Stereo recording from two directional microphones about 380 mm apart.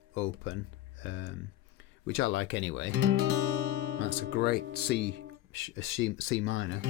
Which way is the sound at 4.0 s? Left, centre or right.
Left.